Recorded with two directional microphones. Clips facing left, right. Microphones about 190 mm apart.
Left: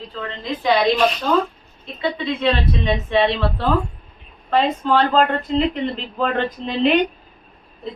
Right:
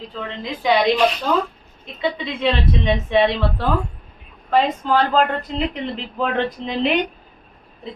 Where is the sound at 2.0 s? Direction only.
20° right (ahead or behind).